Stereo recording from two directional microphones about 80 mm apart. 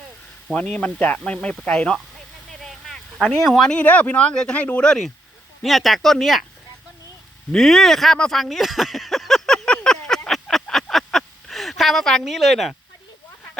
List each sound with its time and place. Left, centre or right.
0.6 s speech: centre
2.8 s speech: centre
7.5 s a sound: centre